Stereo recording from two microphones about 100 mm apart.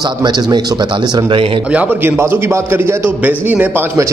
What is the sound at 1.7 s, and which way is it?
Speech, 15° right (ahead or behind).